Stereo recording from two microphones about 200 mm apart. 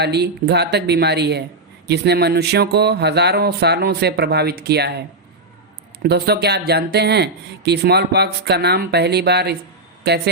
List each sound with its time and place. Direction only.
0.0 s speech: 55° right (ahead or behind)